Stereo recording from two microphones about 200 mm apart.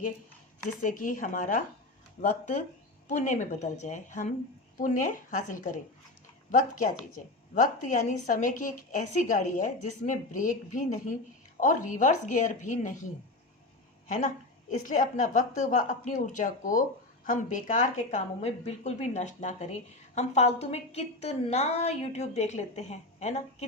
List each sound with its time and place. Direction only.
0.8 s a woman's voice: 40° left (ahead or behind)
14.7 s a woman's voice: 40° left (ahead or behind)